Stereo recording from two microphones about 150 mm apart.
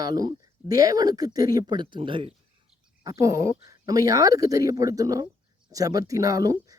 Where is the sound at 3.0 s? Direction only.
20° right (ahead or behind).